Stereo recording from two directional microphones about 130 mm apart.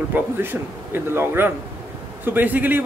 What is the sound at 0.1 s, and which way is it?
Speech, 15° right (ahead or behind).